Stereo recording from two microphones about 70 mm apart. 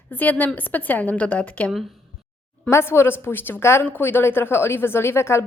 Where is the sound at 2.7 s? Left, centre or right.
Left.